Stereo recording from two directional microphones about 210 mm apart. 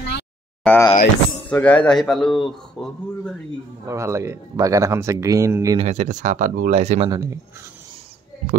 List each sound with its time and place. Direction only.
0.7 s a sound: 10° left (ahead or behind)
1.5 s speech: 5° left (ahead or behind)
3.8 s speech: 15° right (ahead or behind)
5.8 s speech: 35° right (ahead or behind)
7.1 s speech: 15° right (ahead or behind)